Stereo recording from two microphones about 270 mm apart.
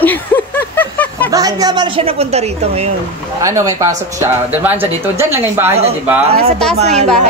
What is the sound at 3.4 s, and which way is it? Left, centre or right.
A woman's voice, centre.